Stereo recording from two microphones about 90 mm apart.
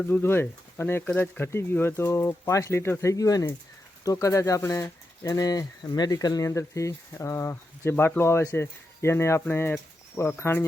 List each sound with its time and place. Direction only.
0.0 s speech: 25° left (ahead or behind)